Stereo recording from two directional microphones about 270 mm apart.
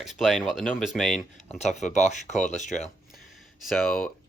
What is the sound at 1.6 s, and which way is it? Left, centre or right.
Speech, left.